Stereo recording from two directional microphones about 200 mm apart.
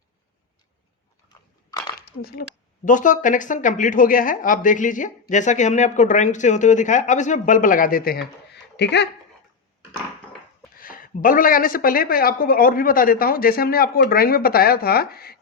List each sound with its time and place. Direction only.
2.0 s a sound: 50° left (ahead or behind)
2.8 s speech: 40° left (ahead or behind)
8.7 s speech: 60° left (ahead or behind)
10.8 s speech: 45° left (ahead or behind)